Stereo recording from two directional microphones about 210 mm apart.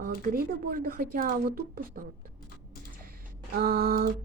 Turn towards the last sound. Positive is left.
turn(degrees=-45)  # may be behind; listen again after turning